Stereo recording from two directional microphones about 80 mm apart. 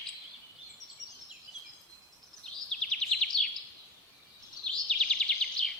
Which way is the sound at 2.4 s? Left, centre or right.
Centre.